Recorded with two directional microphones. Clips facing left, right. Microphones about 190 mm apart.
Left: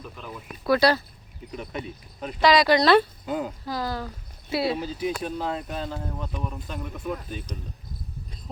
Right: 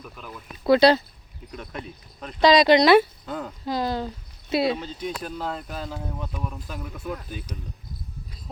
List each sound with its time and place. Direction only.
0.6 s speech: 25° right (ahead or behind)
1.5 s speech: centre (ahead or behind)
2.4 s speech: 20° right (ahead or behind)
3.2 s speech: 10° left (ahead or behind)
3.7 s speech: 20° right (ahead or behind)
4.8 s speech: 5° left (ahead or behind)